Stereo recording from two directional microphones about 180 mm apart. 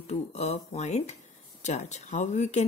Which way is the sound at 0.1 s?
35° left (ahead or behind).